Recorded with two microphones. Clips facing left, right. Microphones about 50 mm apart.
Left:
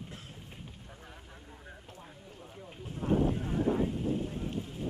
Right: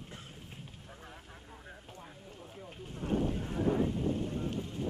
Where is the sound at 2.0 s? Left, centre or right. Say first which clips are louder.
Even; centre.